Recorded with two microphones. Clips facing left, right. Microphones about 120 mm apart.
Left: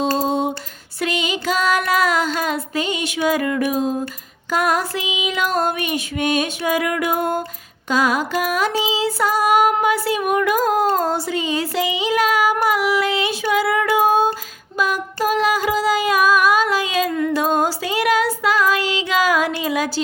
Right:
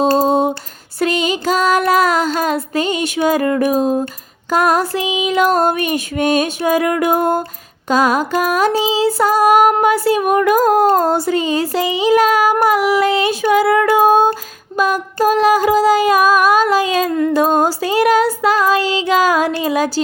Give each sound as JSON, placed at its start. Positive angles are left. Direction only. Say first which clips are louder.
{"t": 0.0, "sound": "lullaby", "louder": "right 6 dB", "side_deg": -45}
{"t": 0.9, "sound": "female singing", "louder": "right 6 dB", "side_deg": -40}
{"t": 4.5, "sound": "music", "louder": "right 5 dB", "side_deg": -40}
{"t": 14.8, "sound": "a sound", "louder": "right 5 dB", "side_deg": -45}